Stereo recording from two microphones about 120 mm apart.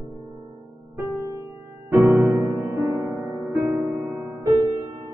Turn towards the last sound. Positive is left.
turn(degrees=-30)  # may be behind; listen again after turning